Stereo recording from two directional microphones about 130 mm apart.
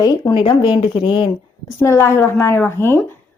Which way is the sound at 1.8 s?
20° left (ahead or behind).